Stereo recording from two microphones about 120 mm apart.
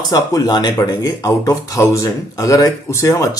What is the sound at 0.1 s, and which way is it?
Speech, 30° left (ahead or behind).